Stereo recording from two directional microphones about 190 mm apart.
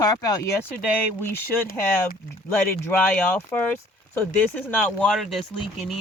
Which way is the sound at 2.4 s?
10° left (ahead or behind).